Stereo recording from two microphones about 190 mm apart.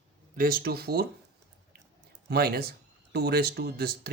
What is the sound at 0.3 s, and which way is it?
Speech, 50° right (ahead or behind).